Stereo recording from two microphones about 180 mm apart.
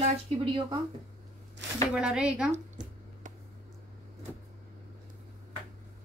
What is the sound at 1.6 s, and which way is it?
Speech, 80° right.